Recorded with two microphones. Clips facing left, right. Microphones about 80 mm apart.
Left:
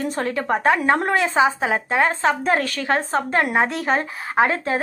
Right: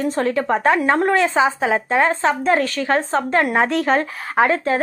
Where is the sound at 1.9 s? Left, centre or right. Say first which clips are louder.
Right 2 dB; right.